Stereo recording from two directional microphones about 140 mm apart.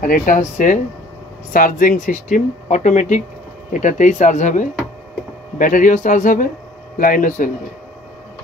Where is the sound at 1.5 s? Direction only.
80° left; by 4.6 s 60° left (ahead or behind).